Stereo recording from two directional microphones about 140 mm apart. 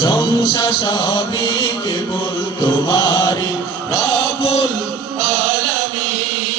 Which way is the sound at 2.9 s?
25° left (ahead or behind).